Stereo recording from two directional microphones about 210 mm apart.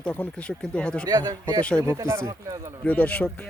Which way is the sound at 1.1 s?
20° right (ahead or behind).